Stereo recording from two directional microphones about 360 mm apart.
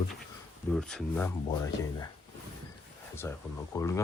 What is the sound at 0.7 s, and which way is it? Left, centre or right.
Speech, centre.